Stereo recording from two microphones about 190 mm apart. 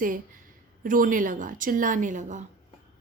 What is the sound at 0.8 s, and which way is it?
A woman's voice, 45° right (ahead or behind).